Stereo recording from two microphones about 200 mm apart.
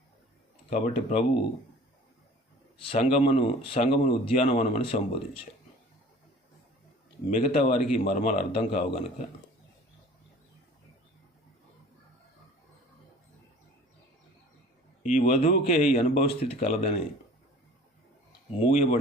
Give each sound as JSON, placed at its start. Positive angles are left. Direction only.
{"t": 0.7, "sound": "speech", "side_deg": 35}
{"t": 2.7, "sound": "speech", "side_deg": 30}
{"t": 7.3, "sound": "speech", "side_deg": 30}
{"t": 15.0, "sound": "speech", "side_deg": 40}
{"t": 18.7, "sound": "speech", "side_deg": 35}